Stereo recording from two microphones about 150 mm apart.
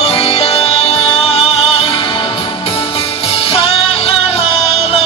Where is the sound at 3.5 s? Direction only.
40° left (ahead or behind).